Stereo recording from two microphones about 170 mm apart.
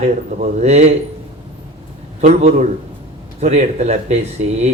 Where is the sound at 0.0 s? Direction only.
40° right (ahead or behind).